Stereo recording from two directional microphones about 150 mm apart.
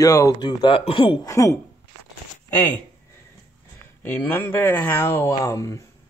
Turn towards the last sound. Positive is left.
turn(degrees=20)  # may be behind; listen again after turning